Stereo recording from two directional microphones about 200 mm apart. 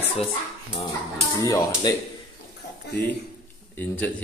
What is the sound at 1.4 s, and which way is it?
Speech, 15° left (ahead or behind).